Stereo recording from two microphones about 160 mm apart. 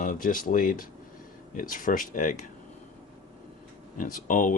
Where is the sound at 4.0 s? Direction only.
55° left (ahead or behind).